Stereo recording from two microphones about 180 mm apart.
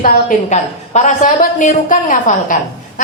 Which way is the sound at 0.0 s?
45° left (ahead or behind).